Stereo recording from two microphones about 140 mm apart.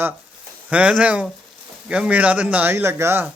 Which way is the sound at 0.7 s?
10° right (ahead or behind).